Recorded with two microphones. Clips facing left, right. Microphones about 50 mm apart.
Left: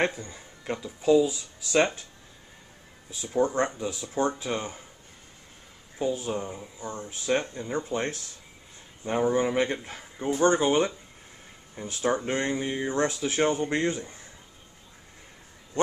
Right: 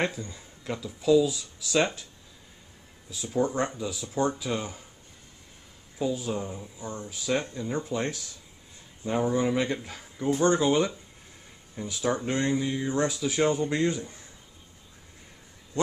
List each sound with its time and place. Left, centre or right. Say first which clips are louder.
0.0 s speech: left 2 dB; left
3.1 s speech: right 1 dB; left
3.3 s speech: left 2 dB; centre
3.7 s speech: left 1 dB; left
5.9 s speech: left 1 dB; left
6.3 s speech: left 1 dB; left
7.1 s speech: left 2 dB; left